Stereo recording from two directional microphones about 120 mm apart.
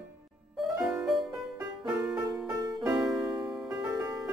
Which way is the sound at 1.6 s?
25° right (ahead or behind).